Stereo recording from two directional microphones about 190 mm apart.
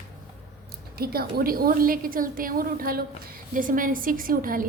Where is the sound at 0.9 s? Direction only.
50° right (ahead or behind).